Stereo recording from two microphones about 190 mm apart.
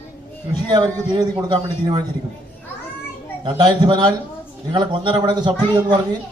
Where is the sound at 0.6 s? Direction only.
25° right (ahead or behind).